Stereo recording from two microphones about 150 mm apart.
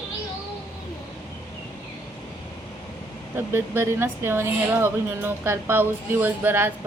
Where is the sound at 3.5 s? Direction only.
15° right (ahead or behind).